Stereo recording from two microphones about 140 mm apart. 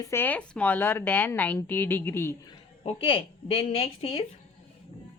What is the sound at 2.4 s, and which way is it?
A woman's voice, 40° left (ahead or behind).